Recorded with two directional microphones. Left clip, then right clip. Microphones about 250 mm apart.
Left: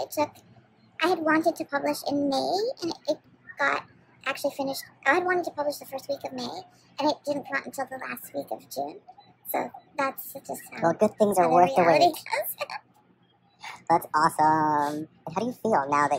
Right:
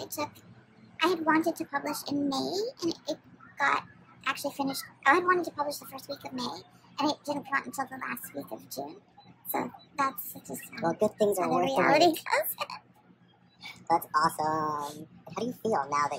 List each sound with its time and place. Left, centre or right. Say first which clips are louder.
0.0 s a child's voice: left 8 dB; centre
10.9 s speech: left 5 dB; centre
11.4 s a woman's voice: left 9 dB; centre
12.5 s speech: left 3 dB; centre
13.6 s speech: left 4 dB; centre
14.6 s speech: left 8 dB; left
15.2 s speech: left 4 dB; centre